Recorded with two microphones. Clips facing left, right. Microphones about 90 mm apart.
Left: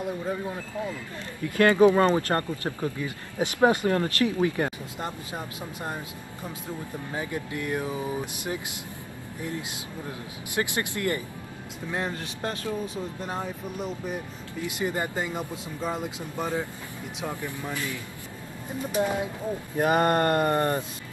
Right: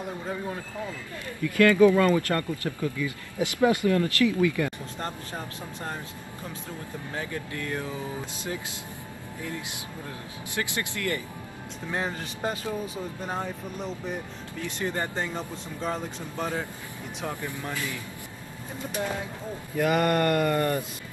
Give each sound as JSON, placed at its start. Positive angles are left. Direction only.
{"t": 1.4, "sound": "speech", "side_deg": 30}
{"t": 5.0, "sound": "speech", "side_deg": 10}
{"t": 7.2, "sound": "speech", "side_deg": 20}
{"t": 10.5, "sound": "a sound", "side_deg": 20}
{"t": 11.9, "sound": "speech", "side_deg": 0}
{"t": 18.9, "sound": "speech", "side_deg": 15}
{"t": 19.8, "sound": "a sound", "side_deg": 25}